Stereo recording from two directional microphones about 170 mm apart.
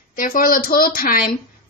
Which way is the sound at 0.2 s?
55° left (ahead or behind).